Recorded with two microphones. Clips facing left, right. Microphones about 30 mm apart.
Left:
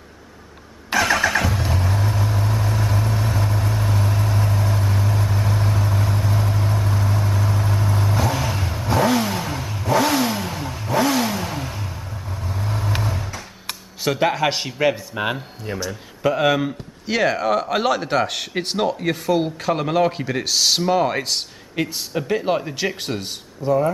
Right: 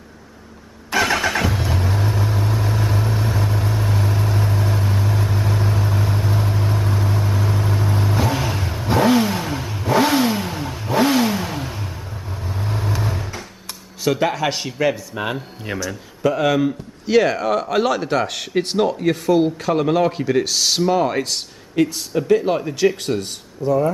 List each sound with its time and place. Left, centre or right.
0.9 s vehicle: centre
14.0 s speech: centre
15.7 s a man's voice: right
16.2 s speech: centre